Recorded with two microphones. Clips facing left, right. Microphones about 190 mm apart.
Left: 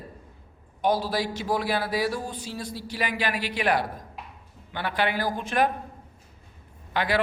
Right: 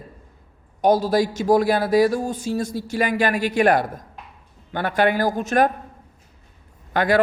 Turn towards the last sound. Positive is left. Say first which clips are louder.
# right 7 dB
turn(degrees=-45)  # may be behind; listen again after turning